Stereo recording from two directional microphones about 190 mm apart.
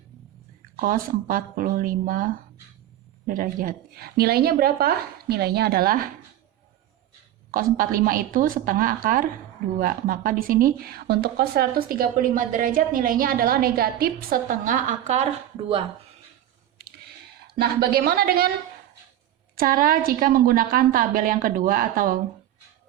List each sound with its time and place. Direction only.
0.8 s speech: 50° right (ahead or behind)
7.5 s speech: 50° right (ahead or behind)
17.6 s speech: 55° right (ahead or behind)
19.5 s speech: 50° right (ahead or behind)